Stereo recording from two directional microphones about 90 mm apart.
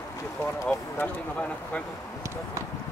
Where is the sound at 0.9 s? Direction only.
15° left (ahead or behind).